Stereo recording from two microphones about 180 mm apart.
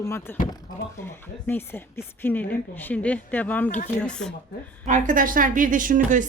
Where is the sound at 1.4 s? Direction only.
10° left (ahead or behind).